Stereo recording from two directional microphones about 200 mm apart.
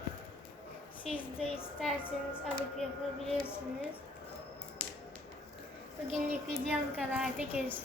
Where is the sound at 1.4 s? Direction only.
30° left (ahead or behind).